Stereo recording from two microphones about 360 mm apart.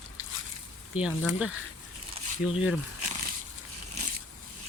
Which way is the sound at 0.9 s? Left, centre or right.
Centre.